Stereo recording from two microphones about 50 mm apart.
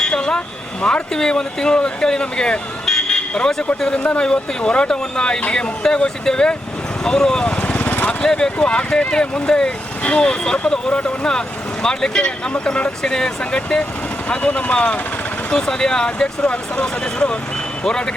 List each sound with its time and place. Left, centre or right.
0.0 s speech: centre
7.6 s vehicle: left
8.2 s speech: centre